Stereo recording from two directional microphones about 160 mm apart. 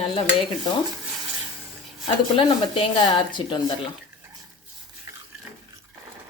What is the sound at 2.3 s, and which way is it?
Speech, 35° left (ahead or behind).